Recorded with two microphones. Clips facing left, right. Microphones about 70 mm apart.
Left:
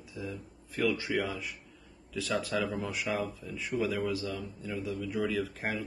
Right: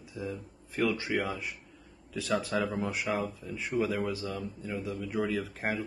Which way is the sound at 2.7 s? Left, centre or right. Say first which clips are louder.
Right 2 dB; right.